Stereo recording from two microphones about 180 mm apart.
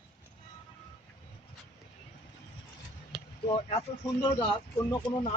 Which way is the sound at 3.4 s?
30° left (ahead or behind).